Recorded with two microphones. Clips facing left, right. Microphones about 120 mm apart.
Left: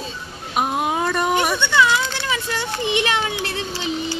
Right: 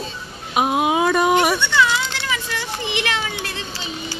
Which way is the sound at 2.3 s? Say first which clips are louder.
Left 2 dB; 25° left (ahead or behind).